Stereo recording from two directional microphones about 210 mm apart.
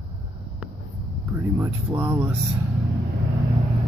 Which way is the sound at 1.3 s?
10° right (ahead or behind).